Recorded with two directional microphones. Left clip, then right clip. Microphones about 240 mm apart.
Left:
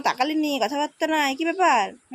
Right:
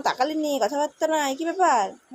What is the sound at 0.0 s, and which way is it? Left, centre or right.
Speech, left.